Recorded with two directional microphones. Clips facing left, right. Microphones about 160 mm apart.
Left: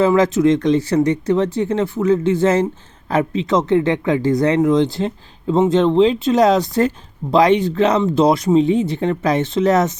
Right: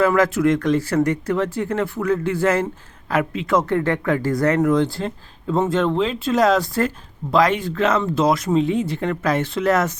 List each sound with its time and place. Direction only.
0.0 s speech: 25° left (ahead or behind)